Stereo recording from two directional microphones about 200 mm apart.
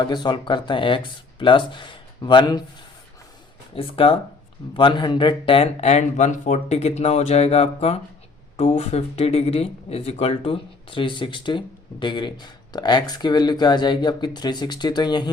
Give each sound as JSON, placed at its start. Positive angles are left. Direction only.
{"t": 0.0, "sound": "speech", "side_deg": 20}
{"t": 3.8, "sound": "speech", "side_deg": 30}